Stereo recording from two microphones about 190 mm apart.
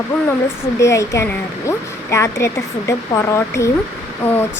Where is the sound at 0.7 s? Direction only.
15° left (ahead or behind).